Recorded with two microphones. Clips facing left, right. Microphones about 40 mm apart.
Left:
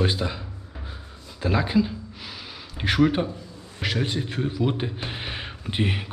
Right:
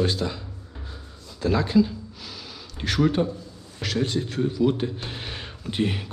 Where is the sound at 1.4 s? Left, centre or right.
Centre.